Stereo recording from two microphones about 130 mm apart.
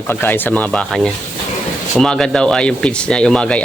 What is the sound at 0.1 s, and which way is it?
Speech, 15° left (ahead or behind).